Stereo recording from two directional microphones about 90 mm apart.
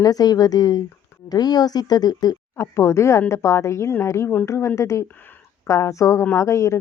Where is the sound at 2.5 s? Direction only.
30° left (ahead or behind).